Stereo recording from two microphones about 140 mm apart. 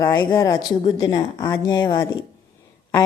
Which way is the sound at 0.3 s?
25° left (ahead or behind).